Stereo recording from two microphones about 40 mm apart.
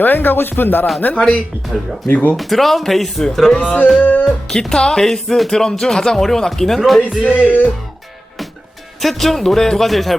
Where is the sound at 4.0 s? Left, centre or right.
Left.